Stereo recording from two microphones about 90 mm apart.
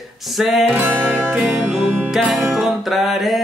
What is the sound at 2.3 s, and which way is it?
Music, centre (ahead or behind).